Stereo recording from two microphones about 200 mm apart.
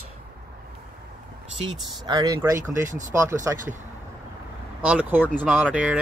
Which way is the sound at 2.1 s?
20° right (ahead or behind).